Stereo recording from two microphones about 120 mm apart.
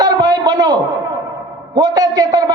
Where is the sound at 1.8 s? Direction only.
30° right (ahead or behind).